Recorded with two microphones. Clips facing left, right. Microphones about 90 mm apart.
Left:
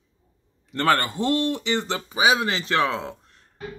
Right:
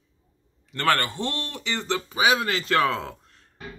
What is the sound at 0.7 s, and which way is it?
Speech, 25° left (ahead or behind).